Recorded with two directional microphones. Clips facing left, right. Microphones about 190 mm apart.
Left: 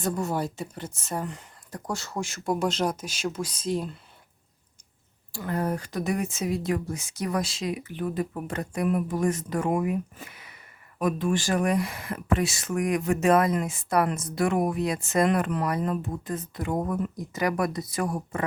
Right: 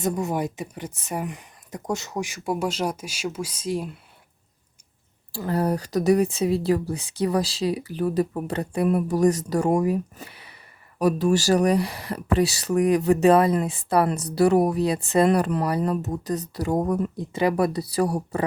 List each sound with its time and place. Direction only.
0.0 s speech: 15° right (ahead or behind)
5.3 s speech: 35° right (ahead or behind)